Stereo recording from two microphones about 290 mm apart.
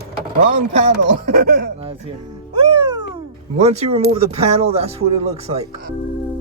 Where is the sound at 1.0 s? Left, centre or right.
Right.